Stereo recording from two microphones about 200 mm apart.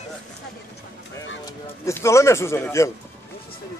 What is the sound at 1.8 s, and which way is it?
Speech, 15° left (ahead or behind).